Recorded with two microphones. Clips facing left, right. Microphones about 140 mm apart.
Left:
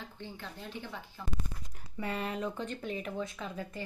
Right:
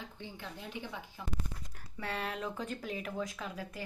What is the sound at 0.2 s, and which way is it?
Speech, 15° right (ahead or behind).